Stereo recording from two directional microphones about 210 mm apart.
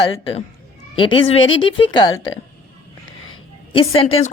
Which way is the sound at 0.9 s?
25° left (ahead or behind).